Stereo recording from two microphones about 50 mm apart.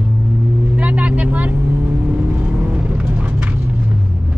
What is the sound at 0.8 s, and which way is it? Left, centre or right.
Vehicle, right.